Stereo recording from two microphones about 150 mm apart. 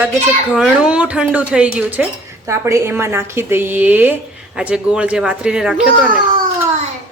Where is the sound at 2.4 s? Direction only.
20° right (ahead or behind).